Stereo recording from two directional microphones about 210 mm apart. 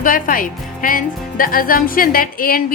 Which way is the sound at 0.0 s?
40° left (ahead or behind).